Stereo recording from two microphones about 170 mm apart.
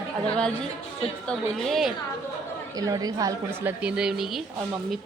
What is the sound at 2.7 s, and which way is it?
A woman's voice, 20° right (ahead or behind).